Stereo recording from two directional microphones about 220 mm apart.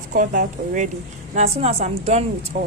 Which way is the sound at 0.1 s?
35° right (ahead or behind).